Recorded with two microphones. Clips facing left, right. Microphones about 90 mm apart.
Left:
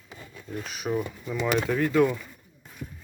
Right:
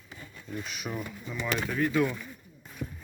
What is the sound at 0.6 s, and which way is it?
Speech, 35° left (ahead or behind).